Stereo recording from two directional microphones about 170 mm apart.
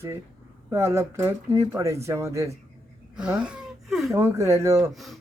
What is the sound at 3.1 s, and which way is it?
Speech, 5° right (ahead or behind).